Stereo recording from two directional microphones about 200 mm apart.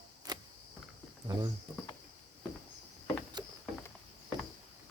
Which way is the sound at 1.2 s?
20° right (ahead or behind).